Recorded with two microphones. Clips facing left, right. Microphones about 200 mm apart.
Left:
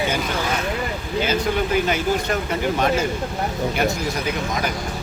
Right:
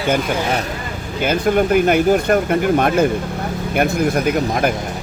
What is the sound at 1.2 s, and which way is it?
Speech, 55° right (ahead or behind).